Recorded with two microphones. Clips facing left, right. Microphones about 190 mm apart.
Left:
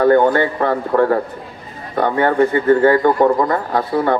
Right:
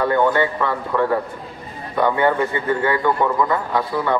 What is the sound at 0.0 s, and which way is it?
Speech, 45° left (ahead or behind).